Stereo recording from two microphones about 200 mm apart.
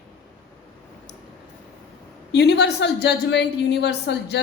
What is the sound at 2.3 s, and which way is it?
A woman's voice, 55° left (ahead or behind).